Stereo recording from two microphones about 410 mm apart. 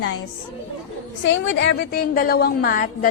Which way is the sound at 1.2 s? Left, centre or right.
Left.